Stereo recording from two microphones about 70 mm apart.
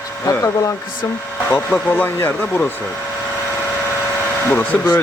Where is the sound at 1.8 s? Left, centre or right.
Left.